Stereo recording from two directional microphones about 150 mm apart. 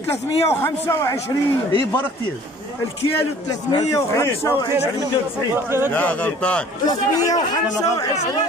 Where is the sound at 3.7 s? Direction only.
25° left (ahead or behind).